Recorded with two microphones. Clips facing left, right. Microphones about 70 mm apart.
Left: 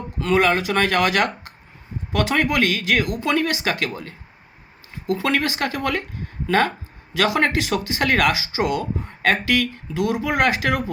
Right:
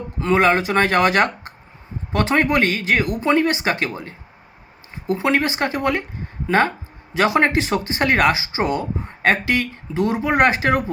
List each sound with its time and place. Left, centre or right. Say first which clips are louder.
0.2 s speech: right 2 dB; right